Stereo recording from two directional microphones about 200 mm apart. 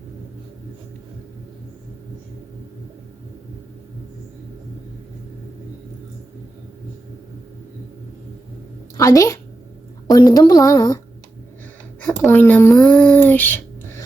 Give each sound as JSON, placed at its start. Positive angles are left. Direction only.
{"t": 9.0, "sound": "a woman's voice", "side_deg": 15}
{"t": 12.0, "sound": "speech", "side_deg": 10}